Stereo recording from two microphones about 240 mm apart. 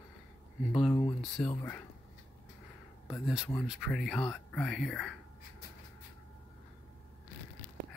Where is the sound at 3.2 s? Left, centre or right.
Centre.